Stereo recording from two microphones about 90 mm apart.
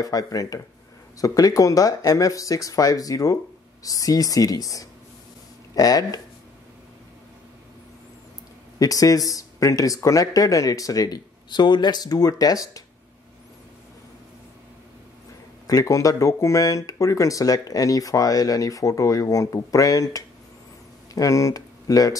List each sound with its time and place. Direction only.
0.0 s speech: 40° left (ahead or behind)
8.7 s speech: 40° left (ahead or behind)
15.6 s speech: 40° left (ahead or behind)